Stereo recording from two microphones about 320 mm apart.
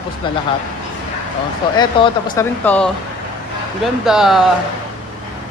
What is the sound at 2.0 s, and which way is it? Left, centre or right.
Speech, centre.